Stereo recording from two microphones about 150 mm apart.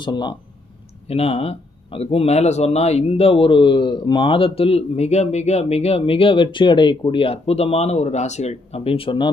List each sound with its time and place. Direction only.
0.0 s a man's voice: 30° left (ahead or behind)
1.0 s a man's voice: 40° left (ahead or behind)